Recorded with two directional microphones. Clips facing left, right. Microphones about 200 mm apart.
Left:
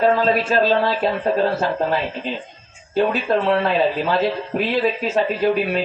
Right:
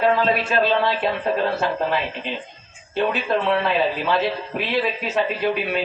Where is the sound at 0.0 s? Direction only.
40° left (ahead or behind).